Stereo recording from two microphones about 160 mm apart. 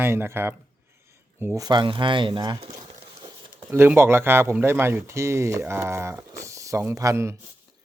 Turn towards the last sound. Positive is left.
turn(degrees=-20)  # may be behind; listen again after turning